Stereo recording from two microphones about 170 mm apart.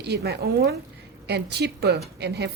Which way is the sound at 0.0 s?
80° right.